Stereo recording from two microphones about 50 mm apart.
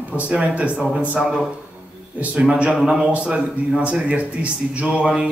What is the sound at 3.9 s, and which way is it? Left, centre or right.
Speech, right.